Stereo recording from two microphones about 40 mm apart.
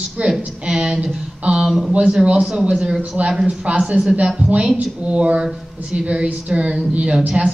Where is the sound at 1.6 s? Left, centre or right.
Centre.